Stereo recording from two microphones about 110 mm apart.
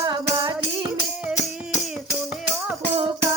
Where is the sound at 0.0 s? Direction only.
40° right (ahead or behind).